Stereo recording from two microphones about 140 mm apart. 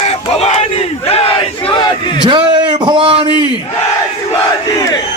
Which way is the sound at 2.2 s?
35° right (ahead or behind).